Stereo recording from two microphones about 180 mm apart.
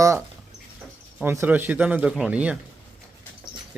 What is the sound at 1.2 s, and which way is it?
A man's voice, 10° right (ahead or behind).